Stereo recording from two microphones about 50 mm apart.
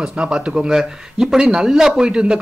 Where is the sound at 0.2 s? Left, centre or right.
Centre.